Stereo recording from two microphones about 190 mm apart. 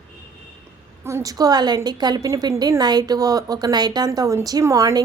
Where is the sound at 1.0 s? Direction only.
15° right (ahead or behind).